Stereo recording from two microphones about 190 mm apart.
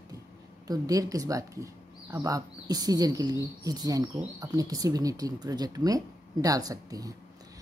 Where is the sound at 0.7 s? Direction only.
20° right (ahead or behind).